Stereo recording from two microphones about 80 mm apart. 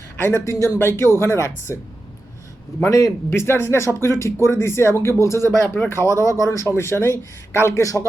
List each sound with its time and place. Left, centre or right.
0.2 s speech: left
2.8 s speech: left